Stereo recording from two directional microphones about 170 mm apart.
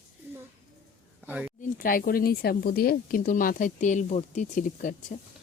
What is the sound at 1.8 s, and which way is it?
Speech, 60° left (ahead or behind).